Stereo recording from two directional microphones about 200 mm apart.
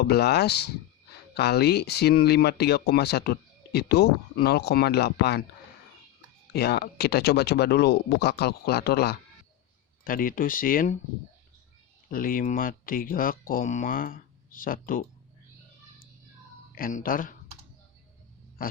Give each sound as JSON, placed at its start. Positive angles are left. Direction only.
{"t": 0.0, "sound": "speech", "side_deg": 55}
{"t": 6.5, "sound": "speech", "side_deg": 55}
{"t": 12.1, "sound": "speech", "side_deg": 45}
{"t": 16.7, "sound": "speech", "side_deg": 45}
{"t": 18.6, "sound": "speech", "side_deg": 45}